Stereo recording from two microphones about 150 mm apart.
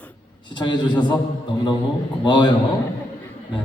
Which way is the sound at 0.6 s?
30° left (ahead or behind).